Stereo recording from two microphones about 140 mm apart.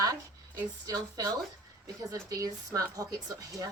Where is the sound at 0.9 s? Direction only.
25° right (ahead or behind).